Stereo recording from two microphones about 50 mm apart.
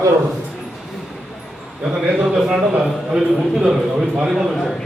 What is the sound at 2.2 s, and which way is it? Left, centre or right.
A man's voice, centre.